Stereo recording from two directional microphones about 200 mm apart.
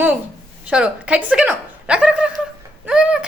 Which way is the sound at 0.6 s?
5° right (ahead or behind).